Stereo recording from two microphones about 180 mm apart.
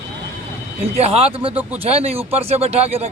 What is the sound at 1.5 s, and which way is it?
Speech, 10° right (ahead or behind).